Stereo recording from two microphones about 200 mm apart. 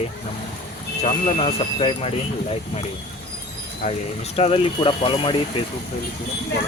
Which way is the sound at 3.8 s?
30° left (ahead or behind).